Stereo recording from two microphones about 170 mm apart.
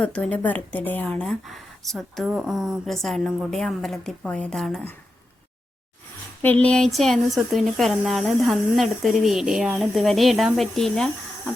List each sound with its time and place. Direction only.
0.0 s a woman's voice: 5° left (ahead or behind)
6.4 s a woman's voice: 10° left (ahead or behind)